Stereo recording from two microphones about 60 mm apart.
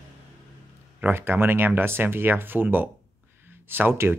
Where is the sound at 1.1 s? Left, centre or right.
Right.